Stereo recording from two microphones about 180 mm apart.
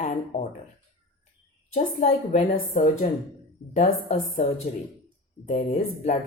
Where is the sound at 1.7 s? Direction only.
45° left (ahead or behind).